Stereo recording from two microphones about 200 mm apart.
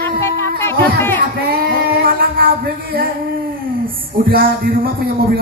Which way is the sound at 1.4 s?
50° right (ahead or behind).